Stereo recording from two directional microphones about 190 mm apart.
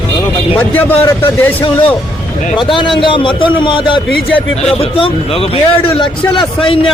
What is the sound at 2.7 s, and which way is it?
A man's voice, 25° left (ahead or behind).